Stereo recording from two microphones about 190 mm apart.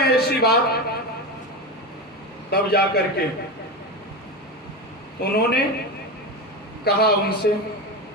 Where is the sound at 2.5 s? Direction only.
55° left (ahead or behind).